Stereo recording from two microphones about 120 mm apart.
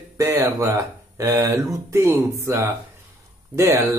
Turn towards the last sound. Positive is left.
turn(degrees=-20)  # may be behind; listen again after turning